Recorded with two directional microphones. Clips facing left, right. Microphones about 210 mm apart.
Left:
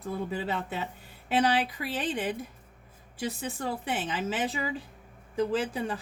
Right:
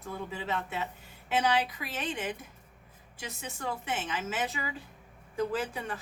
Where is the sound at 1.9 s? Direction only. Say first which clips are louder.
Left 4 dB; 35° left (ahead or behind).